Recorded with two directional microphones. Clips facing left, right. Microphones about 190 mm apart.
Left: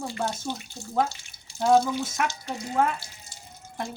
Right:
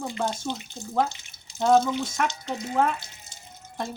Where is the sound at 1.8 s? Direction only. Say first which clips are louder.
Right 1 dB; 20° right (ahead or behind).